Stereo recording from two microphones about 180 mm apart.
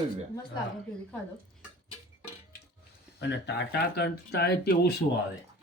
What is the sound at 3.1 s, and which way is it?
Speech, 70° left (ahead or behind).